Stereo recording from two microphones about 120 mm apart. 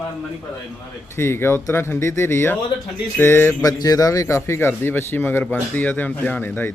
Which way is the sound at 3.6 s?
30° left (ahead or behind).